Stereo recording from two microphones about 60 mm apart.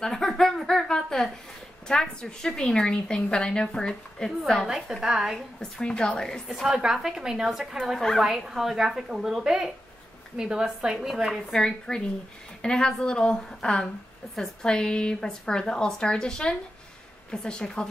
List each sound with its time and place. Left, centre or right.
0.0 s a sound: centre
1.9 s a woman's voice: centre
4.6 s a woman's voice: centre
5.6 s a woman's voice: centre
6.5 s a woman's voice: centre
11.5 s a woman's voice: centre